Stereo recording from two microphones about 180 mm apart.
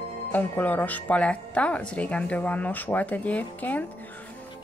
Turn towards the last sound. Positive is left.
turn(degrees=10)  # may be behind; listen again after turning